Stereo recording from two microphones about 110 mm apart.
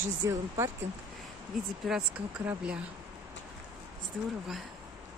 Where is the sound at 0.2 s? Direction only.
35° right (ahead or behind).